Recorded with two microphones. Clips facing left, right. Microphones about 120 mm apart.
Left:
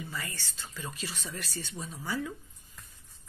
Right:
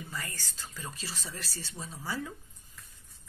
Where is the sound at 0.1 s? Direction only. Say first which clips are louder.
Left 1 dB; 40° right (ahead or behind).